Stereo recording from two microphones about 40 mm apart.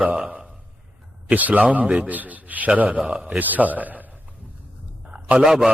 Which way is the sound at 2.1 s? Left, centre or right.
Right.